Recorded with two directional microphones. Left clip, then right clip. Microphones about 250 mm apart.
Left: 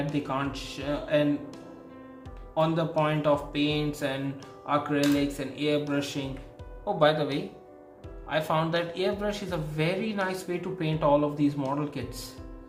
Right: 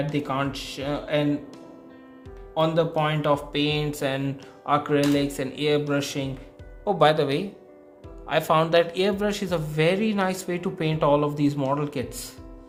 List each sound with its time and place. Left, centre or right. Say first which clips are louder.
0.1 s speech: right 4 dB; right
2.6 s speech: right 3 dB; right